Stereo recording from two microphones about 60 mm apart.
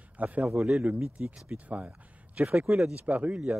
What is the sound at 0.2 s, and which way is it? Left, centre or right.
Speech, right.